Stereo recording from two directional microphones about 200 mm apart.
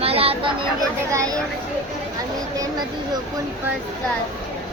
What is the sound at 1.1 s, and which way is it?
Speech, 15° right (ahead or behind).